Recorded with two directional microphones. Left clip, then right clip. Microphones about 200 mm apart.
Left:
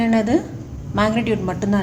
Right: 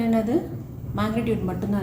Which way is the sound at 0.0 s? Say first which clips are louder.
Left 5 dB; 50° left (ahead or behind).